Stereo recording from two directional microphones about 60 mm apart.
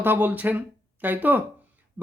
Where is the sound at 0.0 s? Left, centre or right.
Right.